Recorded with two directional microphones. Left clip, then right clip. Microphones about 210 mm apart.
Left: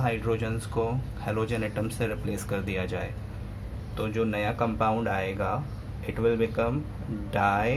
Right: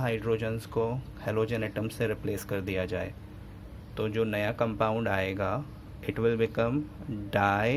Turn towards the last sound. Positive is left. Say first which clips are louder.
# left 1 dB
turn(degrees=-35)  # may be behind; listen again after turning